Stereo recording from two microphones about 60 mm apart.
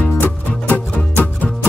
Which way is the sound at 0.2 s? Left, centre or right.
Left.